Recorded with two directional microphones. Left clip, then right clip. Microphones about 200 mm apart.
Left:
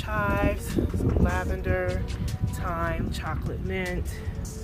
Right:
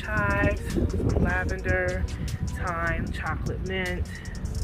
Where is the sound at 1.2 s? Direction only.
15° left (ahead or behind).